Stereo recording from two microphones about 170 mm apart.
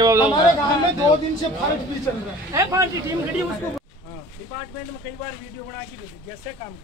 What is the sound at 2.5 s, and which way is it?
Speech, 20° right (ahead or behind).